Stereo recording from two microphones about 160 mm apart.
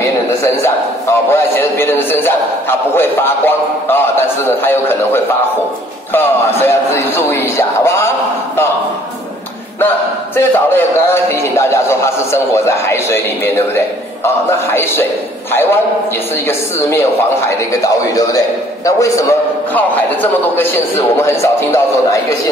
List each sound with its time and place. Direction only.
1.1 s a man's voice: 15° left (ahead or behind)
9.8 s a man's voice: 15° left (ahead or behind)
17.5 s a man's voice: 20° left (ahead or behind)